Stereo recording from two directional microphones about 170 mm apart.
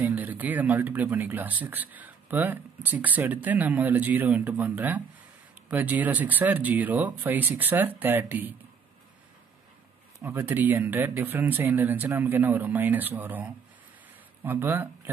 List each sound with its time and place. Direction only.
0.0 s speech: 10° right (ahead or behind)
10.2 s speech: 10° right (ahead or behind)